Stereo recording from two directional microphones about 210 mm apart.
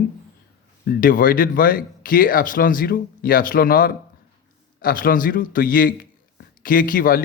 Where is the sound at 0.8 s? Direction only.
40° left (ahead or behind).